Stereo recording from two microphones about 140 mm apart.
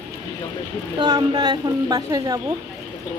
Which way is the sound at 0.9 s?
30° right (ahead or behind).